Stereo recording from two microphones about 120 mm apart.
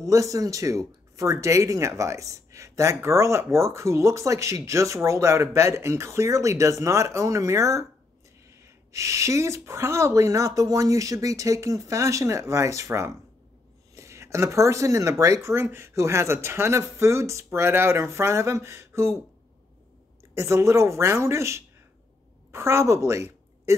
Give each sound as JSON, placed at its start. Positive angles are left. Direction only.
{"t": 0.0, "sound": "speech", "side_deg": -25}
{"t": 20.3, "sound": "a woman's voice", "side_deg": -25}